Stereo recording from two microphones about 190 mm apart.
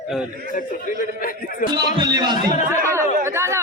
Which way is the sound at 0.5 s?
45° left (ahead or behind).